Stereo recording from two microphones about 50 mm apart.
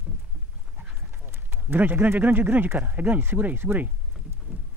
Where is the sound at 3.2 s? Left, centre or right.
Right.